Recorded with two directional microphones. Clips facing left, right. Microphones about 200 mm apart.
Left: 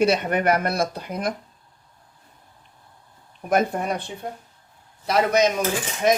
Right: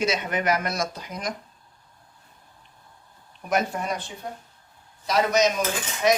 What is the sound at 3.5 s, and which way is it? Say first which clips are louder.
Speech: left 4 dB; 55° left (ahead or behind).